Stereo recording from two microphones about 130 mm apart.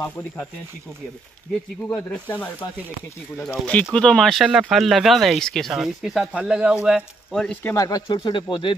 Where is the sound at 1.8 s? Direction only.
15° left (ahead or behind); by 7.4 s 5° right (ahead or behind).